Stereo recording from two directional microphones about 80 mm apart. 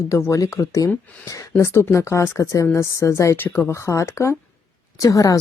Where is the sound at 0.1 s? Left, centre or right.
Left.